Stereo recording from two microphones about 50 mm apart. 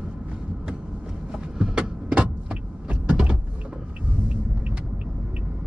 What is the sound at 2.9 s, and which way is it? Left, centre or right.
Power windows, right.